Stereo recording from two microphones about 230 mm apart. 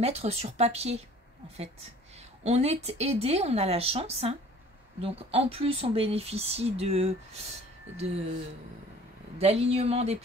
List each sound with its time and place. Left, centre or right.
0.0 s speech: right
2.1 s speech: right
9.4 s speech: right